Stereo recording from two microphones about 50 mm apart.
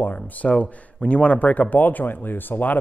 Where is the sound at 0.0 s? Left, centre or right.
Left.